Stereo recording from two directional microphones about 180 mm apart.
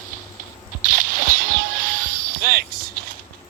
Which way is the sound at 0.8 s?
50° right (ahead or behind).